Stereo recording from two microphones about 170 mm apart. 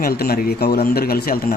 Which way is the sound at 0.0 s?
60° left (ahead or behind).